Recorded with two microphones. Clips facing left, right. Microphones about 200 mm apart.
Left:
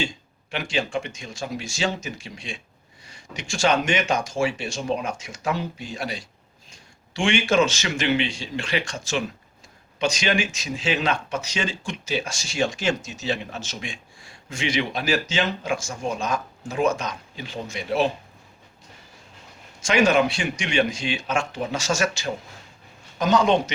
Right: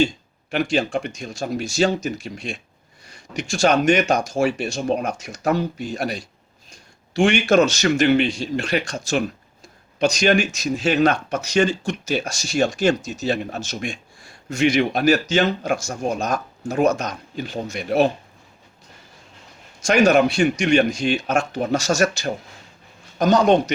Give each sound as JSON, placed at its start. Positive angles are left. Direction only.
{"t": 0.5, "sound": "speech", "side_deg": -40}
{"t": 19.8, "sound": "speech", "side_deg": -40}